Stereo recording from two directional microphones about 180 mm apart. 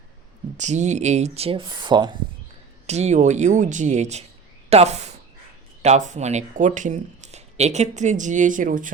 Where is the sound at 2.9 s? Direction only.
40° right (ahead or behind).